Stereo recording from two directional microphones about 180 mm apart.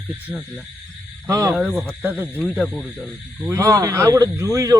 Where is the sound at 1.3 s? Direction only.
15° right (ahead or behind).